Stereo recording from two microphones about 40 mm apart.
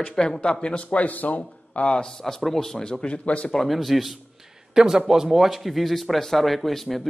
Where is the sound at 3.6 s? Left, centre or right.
Centre.